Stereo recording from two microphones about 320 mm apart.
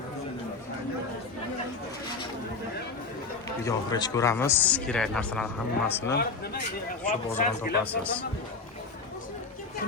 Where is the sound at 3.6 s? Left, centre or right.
Centre.